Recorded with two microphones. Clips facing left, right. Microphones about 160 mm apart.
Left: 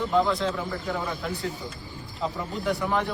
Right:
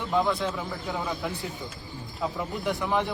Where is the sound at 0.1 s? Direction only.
20° right (ahead or behind).